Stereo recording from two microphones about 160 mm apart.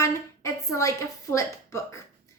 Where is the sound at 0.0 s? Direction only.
15° left (ahead or behind).